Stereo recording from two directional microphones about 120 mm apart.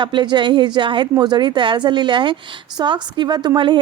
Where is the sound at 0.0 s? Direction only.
40° right (ahead or behind).